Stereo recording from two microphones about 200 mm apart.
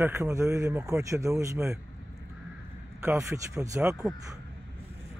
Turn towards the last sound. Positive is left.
turn(degrees=-5)  # may be behind; listen again after turning